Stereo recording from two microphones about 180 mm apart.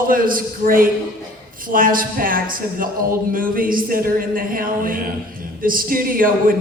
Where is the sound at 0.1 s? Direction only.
50° right (ahead or behind).